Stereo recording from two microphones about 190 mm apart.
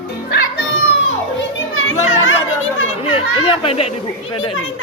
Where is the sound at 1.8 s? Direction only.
90° left.